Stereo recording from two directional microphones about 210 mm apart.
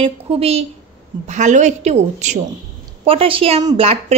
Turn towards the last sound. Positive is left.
turn(degrees=-25)  # may be behind; listen again after turning